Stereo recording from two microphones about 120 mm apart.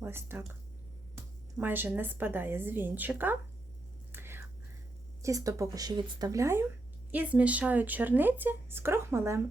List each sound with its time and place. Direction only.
0.0 s speech: 20° right (ahead or behind)
1.5 s speech: 15° right (ahead or behind)
4.1 s whispering: 20° right (ahead or behind)
5.2 s speech: 25° right (ahead or behind)
7.1 s speech: 10° right (ahead or behind)